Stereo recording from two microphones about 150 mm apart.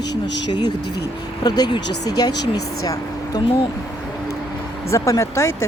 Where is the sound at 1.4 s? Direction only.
25° left (ahead or behind).